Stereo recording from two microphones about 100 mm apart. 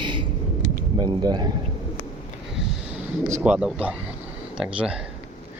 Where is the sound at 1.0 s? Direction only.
40° right (ahead or behind).